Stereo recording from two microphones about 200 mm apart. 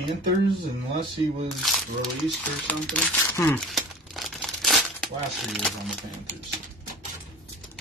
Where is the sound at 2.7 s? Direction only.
5° left (ahead or behind).